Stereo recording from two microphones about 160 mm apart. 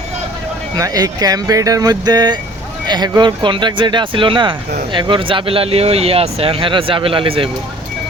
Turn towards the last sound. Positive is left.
turn(degrees=-35)  # may be behind; listen again after turning